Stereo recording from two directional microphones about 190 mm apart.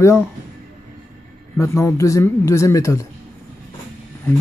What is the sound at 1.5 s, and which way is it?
A man's voice, 15° left (ahead or behind).